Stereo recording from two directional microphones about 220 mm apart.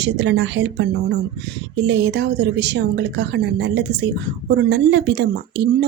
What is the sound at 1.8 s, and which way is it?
Speech, 55° right (ahead or behind).